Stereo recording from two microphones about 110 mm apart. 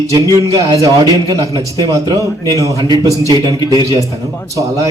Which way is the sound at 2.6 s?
30° right (ahead or behind).